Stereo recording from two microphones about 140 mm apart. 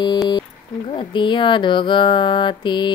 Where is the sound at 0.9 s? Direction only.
35° left (ahead or behind).